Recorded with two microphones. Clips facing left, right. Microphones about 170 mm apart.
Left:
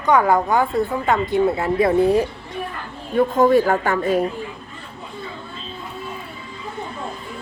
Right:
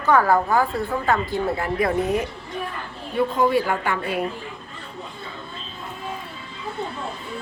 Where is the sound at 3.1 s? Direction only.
45° left (ahead or behind).